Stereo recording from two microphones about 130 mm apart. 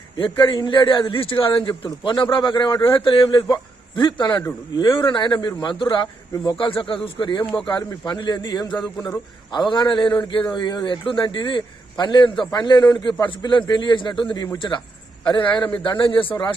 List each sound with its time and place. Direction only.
0.3 s a man's voice: 40° left (ahead or behind)